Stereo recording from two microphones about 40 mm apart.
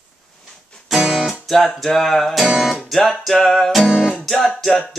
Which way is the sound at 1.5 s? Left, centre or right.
Centre.